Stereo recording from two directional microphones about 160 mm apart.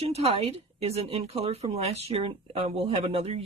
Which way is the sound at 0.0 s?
40° right (ahead or behind).